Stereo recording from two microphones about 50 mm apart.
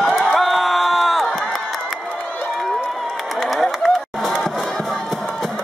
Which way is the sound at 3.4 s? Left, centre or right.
Centre.